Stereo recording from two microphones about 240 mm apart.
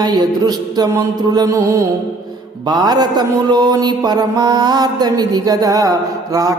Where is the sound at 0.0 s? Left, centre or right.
Centre.